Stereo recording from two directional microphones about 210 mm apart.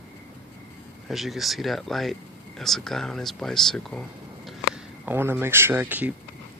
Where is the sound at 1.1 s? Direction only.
Centre (ahead or behind).